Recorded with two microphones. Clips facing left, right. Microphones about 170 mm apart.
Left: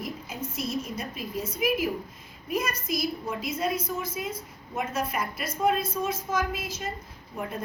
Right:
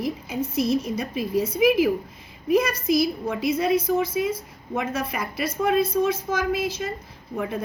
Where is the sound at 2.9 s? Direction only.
75° right (ahead or behind).